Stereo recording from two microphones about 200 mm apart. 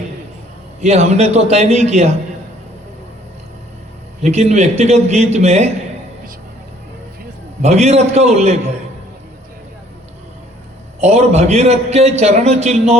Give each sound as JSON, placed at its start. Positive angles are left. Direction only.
{"t": 0.8, "sound": "a man's voice", "side_deg": -35}
{"t": 4.2, "sound": "a man's voice", "side_deg": -35}
{"t": 7.6, "sound": "a man's voice", "side_deg": -35}
{"t": 11.0, "sound": "a man's voice", "side_deg": -35}